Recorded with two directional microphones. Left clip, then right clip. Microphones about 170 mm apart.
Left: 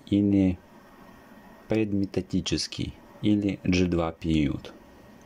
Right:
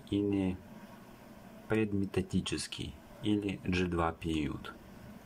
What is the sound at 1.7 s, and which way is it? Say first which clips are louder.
Speech: left 6 dB; 20° left (ahead or behind).